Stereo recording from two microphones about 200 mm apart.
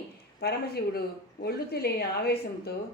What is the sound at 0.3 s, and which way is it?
A woman's voice, 50° left (ahead or behind).